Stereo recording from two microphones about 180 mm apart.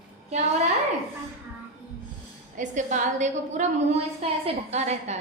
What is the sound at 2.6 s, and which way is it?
A woman's voice, 45° right (ahead or behind).